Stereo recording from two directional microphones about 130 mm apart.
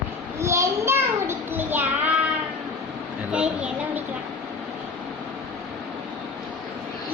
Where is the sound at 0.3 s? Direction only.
20° right (ahead or behind).